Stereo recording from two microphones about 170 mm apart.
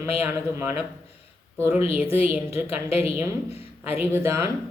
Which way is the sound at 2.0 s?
35° left (ahead or behind).